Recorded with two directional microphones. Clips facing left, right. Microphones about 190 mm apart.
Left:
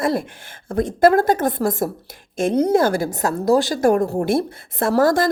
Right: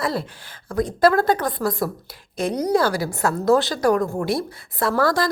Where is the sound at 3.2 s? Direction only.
40° left (ahead or behind).